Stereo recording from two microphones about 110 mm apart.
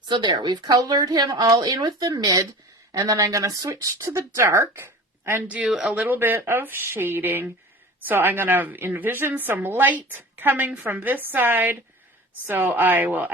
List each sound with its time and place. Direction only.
0.1 s a woman's voice: 45° right (ahead or behind); by 13.3 s 15° right (ahead or behind)